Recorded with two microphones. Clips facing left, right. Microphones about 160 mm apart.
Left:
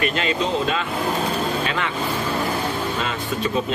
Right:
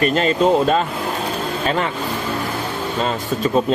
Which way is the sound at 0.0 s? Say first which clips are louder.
Right 6 dB; 40° right (ahead or behind).